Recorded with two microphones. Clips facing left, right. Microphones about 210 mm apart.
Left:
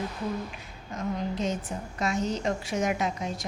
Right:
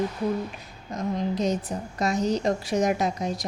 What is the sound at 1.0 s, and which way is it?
Speech, 40° right (ahead or behind).